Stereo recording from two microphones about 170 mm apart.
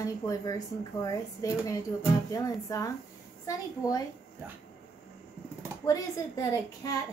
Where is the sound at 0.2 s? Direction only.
20° left (ahead or behind).